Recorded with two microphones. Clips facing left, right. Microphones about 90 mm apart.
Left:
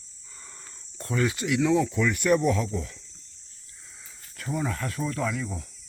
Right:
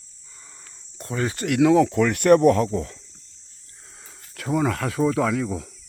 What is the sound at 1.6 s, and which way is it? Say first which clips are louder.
Speech: right 7 dB; 70° right (ahead or behind).